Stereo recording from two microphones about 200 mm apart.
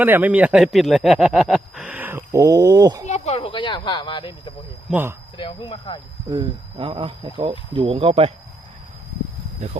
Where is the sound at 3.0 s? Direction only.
35° left (ahead or behind).